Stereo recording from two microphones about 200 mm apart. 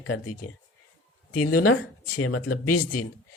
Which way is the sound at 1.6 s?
90° left.